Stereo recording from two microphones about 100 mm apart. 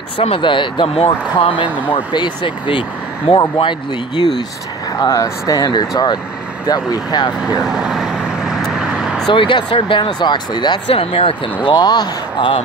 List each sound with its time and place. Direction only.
0.4 s speech: 55° left (ahead or behind)
5.0 s speech: 40° left (ahead or behind)
7.5 s vehicle: 5° right (ahead or behind)
9.3 s speech: 55° left (ahead or behind)
11.0 s speech: 80° left
11.6 s speech: 50° left (ahead or behind)